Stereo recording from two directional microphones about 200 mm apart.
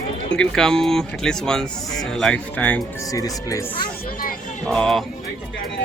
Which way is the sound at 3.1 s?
15° left (ahead or behind).